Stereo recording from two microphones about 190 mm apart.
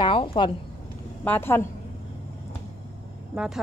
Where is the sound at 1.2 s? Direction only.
10° left (ahead or behind).